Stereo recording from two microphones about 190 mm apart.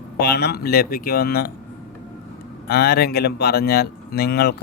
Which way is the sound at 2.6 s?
55° left (ahead or behind).